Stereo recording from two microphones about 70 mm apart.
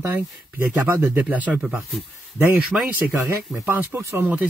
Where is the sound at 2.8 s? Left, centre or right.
Right.